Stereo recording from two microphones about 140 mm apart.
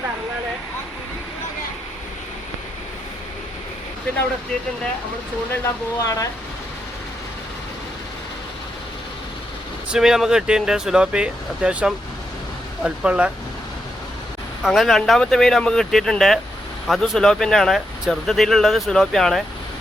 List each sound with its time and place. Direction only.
5.6 s speech: 25° left (ahead or behind)
9.9 s speech: 5° right (ahead or behind)
14.6 s speech: centre (ahead or behind)